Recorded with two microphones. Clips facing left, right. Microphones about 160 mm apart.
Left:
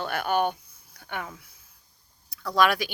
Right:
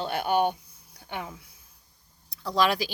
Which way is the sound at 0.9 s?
20° right (ahead or behind).